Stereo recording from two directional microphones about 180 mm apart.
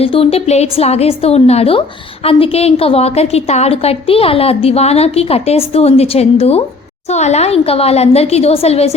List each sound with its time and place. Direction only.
0.0 s a woman's voice: 30° left (ahead or behind)